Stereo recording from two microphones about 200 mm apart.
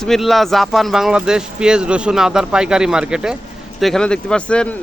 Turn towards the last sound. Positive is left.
turn(degrees=5)  # may be behind; listen again after turning